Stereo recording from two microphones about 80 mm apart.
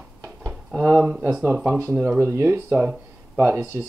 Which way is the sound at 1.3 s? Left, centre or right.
Centre.